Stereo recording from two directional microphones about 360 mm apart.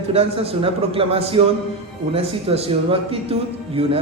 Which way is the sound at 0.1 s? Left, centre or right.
Centre.